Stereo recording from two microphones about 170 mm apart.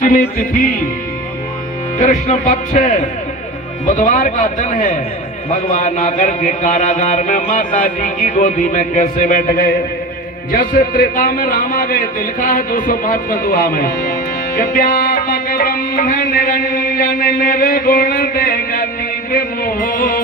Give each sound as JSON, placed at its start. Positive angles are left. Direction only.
{"t": 0.0, "sound": "music", "side_deg": 50}
{"t": 2.0, "sound": "mantra", "side_deg": 45}
{"t": 10.5, "sound": "a man's voice", "side_deg": 55}
{"t": 14.5, "sound": "music", "side_deg": 55}
{"t": 19.3, "sound": "a man's voice", "side_deg": 60}